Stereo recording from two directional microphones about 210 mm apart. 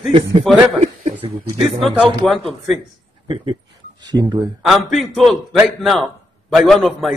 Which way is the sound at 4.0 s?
20° right (ahead or behind).